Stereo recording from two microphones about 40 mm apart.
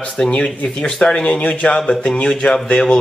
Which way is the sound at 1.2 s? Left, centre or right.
Left.